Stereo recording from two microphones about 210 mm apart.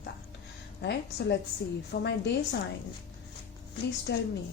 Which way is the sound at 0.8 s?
55° left (ahead or behind).